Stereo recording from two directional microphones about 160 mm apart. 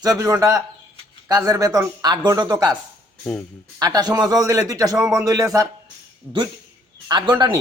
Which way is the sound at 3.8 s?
25° right (ahead or behind).